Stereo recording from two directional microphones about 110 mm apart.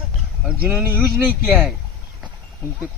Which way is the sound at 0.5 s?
15° right (ahead or behind).